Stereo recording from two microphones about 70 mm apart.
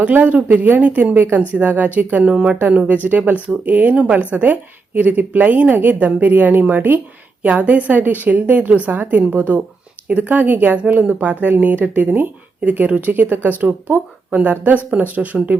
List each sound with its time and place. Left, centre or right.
0.0 s speech: right